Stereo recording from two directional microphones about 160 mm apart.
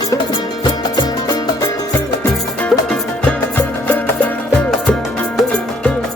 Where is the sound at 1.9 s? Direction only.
15° left (ahead or behind).